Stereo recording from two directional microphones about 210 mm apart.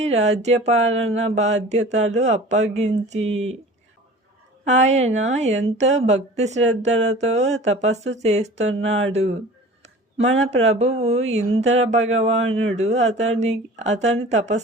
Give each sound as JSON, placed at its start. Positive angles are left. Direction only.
{"t": 0.0, "sound": "speech", "side_deg": -30}
{"t": 4.6, "sound": "speech", "side_deg": -35}
{"t": 10.2, "sound": "speech", "side_deg": -30}